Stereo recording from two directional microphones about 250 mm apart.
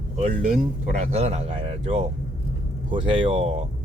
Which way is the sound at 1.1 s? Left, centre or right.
Right.